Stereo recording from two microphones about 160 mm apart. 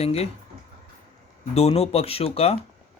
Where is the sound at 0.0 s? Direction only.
40° left (ahead or behind).